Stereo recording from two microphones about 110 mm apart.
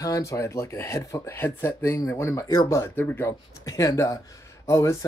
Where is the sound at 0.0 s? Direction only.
30° left (ahead or behind).